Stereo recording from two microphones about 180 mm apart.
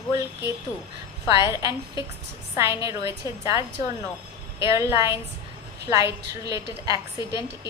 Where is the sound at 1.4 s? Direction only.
15° right (ahead or behind).